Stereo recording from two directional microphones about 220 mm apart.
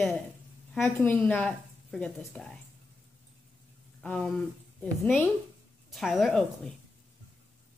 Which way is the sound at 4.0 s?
5° left (ahead or behind).